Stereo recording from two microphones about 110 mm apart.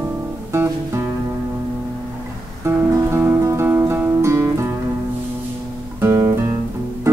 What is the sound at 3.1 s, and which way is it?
Music, 25° right (ahead or behind).